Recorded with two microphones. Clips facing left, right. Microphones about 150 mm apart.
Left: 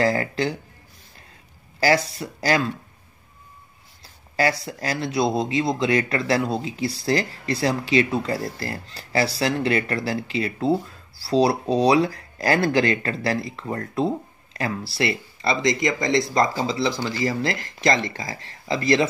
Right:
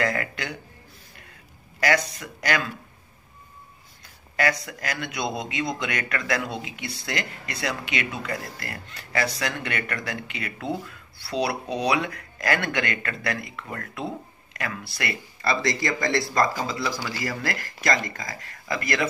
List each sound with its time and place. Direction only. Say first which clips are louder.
0.0 s speech: left 6 dB; 30° left (ahead or behind)
1.8 s speech: left 4 dB; 30° left (ahead or behind)
4.0 s a sound: left 3 dB; 30° left (ahead or behind)
4.6 s speech: left 5 dB; 30° left (ahead or behind)